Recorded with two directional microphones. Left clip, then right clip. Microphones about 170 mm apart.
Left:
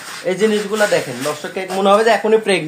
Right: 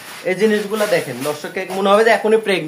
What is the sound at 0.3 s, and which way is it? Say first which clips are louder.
Speech: even; 15° left (ahead or behind).